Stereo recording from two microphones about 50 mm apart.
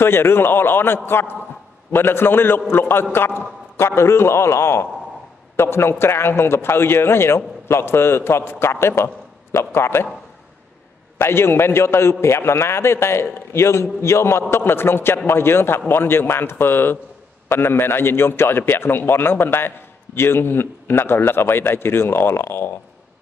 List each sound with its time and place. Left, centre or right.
0.0 s a man's voice: left
11.1 s a man's voice: left
14.5 s a man's voice: left